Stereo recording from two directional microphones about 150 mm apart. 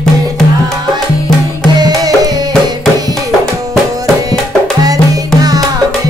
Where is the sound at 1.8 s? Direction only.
25° right (ahead or behind).